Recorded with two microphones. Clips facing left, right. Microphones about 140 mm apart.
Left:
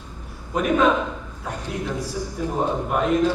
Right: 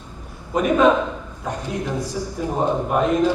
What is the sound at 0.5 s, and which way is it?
Speech, centre (ahead or behind).